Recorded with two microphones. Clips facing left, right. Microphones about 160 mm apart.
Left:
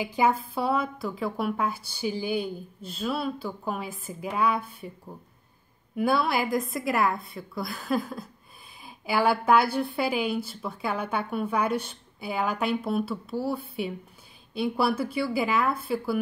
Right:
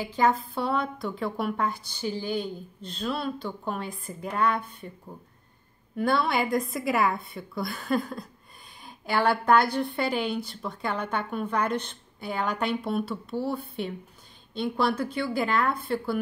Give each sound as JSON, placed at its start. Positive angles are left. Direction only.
{"t": 0.0, "sound": "a woman's voice", "side_deg": 10}